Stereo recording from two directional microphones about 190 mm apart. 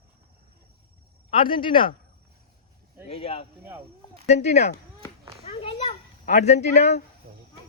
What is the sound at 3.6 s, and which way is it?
Speech, 10° right (ahead or behind).